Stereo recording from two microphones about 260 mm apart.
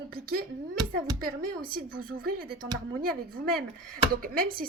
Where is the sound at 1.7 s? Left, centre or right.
Right.